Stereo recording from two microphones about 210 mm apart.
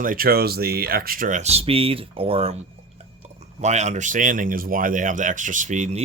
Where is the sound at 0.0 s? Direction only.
40° right (ahead or behind).